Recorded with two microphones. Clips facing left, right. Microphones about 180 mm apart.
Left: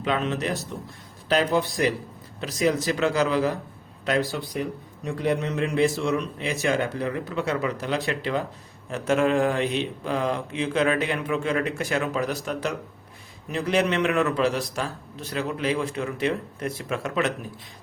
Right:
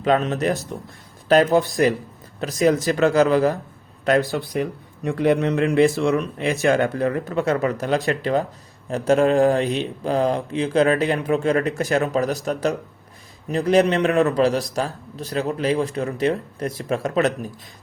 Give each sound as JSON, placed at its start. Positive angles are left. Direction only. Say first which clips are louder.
{"t": 0.0, "sound": "a man's voice", "louder": "right 6 dB", "side_deg": -45}